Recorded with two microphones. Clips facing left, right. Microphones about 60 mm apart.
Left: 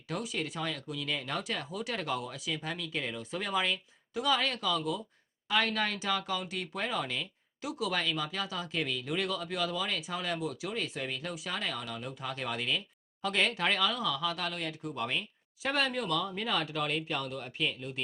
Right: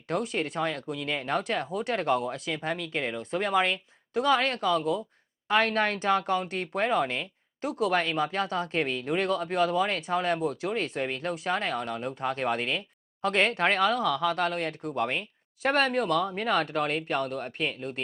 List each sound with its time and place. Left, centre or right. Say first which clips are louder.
0.1 s speech: right 6 dB; right
1.6 s speech: right 6 dB; right
1.9 s speech: right 9 dB; right
2.1 s speech: right 6 dB; right